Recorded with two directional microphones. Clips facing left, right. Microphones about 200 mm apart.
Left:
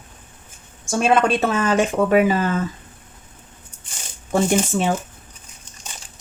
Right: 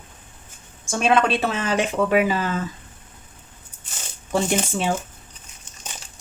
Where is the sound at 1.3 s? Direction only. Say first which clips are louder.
Left 4 dB; 45° left (ahead or behind).